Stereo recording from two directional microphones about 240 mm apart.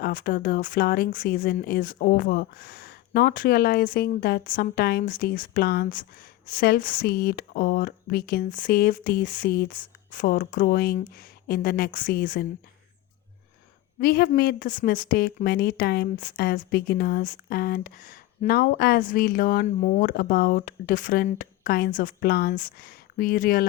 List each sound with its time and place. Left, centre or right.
0.0 s speech: left
14.0 s speech: left